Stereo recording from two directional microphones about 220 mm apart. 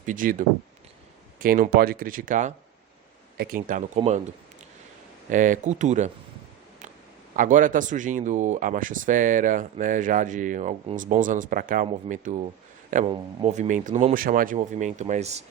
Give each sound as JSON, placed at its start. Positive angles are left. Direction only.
{"t": 0.0, "sound": "speech", "side_deg": -35}
{"t": 5.3, "sound": "speech", "side_deg": -35}
{"t": 7.3, "sound": "speech", "side_deg": -35}